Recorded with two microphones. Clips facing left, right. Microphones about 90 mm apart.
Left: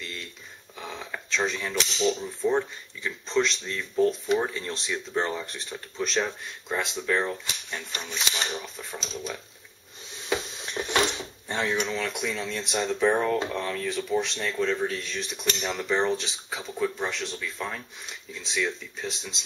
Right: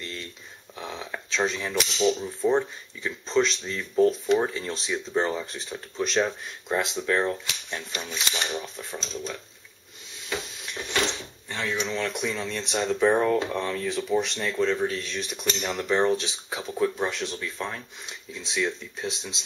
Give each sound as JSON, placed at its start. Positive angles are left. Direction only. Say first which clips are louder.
{"t": 0.0, "sound": "speech", "louder": "right 2 dB", "side_deg": 0}
{"t": 10.3, "sound": "a sound", "louder": "left 4 dB", "side_deg": 30}
{"t": 11.7, "sound": "speech", "louder": "even", "side_deg": 5}